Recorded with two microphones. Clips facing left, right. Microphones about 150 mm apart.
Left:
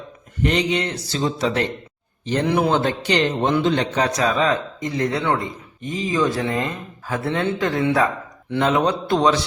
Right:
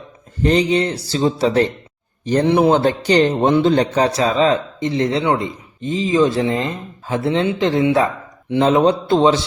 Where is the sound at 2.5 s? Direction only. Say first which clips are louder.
Right 5 dB; 25° right (ahead or behind).